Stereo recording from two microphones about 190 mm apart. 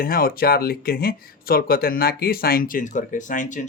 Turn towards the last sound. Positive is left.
turn(degrees=40)  # may be behind; listen again after turning